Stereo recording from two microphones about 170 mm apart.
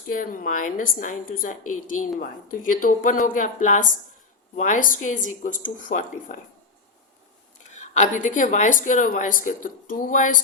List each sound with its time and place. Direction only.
0.1 s a woman's voice: 55° left (ahead or behind)
7.7 s a woman's voice: 45° left (ahead or behind)